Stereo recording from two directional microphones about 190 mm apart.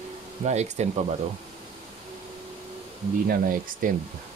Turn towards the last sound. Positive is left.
turn(degrees=-50)  # may be behind; listen again after turning